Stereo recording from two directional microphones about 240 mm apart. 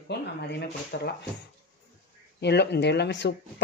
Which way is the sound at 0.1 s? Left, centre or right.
Left.